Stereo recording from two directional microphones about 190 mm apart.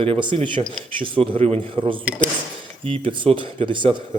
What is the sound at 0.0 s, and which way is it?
Speech, 25° right (ahead or behind).